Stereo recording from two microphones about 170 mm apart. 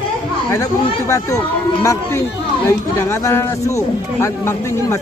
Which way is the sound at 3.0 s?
15° left (ahead or behind).